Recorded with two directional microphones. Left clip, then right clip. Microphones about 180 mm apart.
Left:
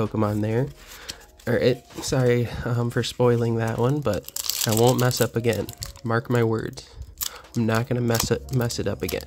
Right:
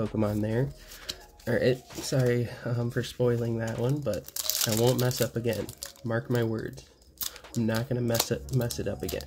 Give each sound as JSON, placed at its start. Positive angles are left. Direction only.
{"t": 0.1, "sound": "speech", "side_deg": 30}